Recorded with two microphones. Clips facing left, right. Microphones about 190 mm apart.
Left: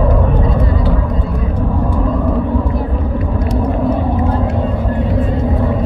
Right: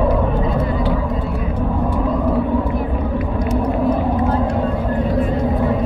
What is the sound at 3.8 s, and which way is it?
Vehicle, centre (ahead or behind).